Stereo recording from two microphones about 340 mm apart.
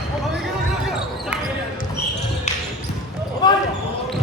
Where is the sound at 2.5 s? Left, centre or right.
Centre.